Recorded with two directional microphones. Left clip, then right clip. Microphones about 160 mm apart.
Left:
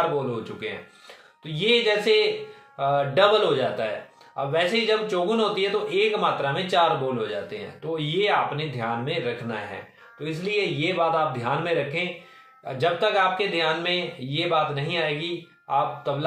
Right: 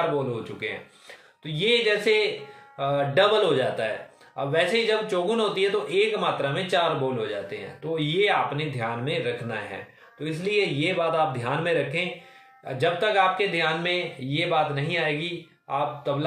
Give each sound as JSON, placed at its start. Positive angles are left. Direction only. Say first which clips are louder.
{"t": 0.4, "sound": "a man's voice", "louder": "even", "side_deg": -10}